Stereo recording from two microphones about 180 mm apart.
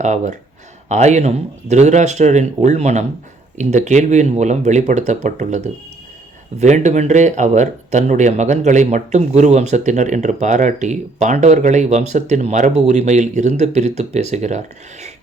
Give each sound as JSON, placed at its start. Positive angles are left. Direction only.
{"t": 0.0, "sound": "speech", "side_deg": -40}